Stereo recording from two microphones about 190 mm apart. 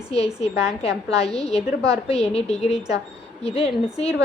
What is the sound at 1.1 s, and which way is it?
A woman's voice, 35° left (ahead or behind).